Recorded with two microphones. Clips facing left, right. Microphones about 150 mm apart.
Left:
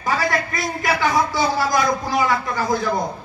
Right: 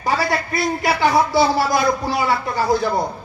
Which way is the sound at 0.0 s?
35° right (ahead or behind).